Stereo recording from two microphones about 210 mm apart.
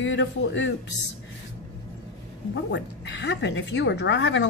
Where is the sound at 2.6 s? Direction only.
55° left (ahead or behind).